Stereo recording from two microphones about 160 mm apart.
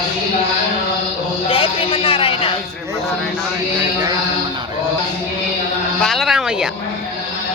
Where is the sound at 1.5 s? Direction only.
35° left (ahead or behind).